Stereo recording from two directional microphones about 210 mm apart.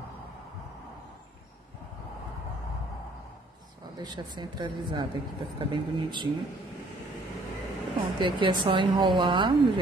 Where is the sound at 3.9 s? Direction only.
20° right (ahead or behind).